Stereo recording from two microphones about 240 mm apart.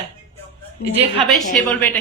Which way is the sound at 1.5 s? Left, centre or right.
Centre.